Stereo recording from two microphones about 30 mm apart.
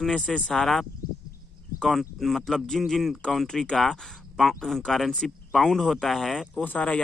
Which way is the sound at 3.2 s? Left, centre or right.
Left.